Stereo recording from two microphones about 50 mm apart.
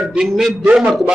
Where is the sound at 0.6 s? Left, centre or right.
Right.